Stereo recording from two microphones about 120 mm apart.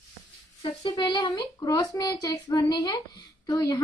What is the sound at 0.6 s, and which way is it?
A woman's voice, 40° left (ahead or behind).